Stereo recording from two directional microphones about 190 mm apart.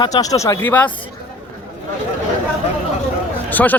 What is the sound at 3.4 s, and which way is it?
Speech, 10° left (ahead or behind).